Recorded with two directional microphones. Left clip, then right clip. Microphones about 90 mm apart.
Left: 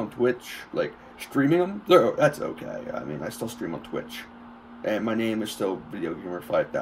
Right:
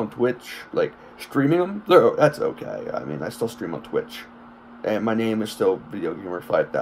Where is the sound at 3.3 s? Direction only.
50° right (ahead or behind).